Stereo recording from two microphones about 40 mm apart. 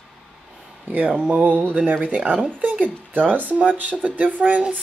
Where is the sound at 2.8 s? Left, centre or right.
Right.